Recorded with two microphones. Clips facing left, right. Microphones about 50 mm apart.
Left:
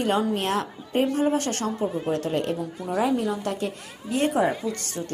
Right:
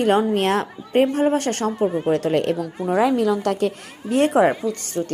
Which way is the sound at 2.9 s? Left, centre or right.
Right.